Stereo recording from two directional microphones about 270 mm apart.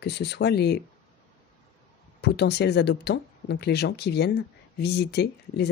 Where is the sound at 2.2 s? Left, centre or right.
Left.